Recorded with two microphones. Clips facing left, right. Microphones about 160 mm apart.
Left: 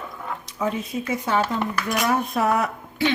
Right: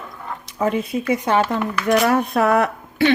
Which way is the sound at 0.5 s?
65° right (ahead or behind).